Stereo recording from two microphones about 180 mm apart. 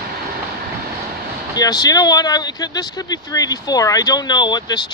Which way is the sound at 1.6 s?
20° left (ahead or behind).